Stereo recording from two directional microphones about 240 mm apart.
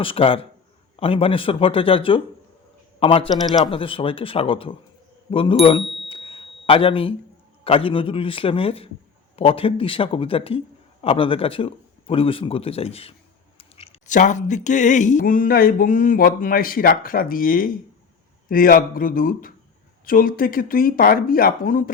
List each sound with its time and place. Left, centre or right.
0.0 s a man's voice: left
5.6 s bicycle bell: left
7.6 s a man's voice: left
13.6 s a sound: left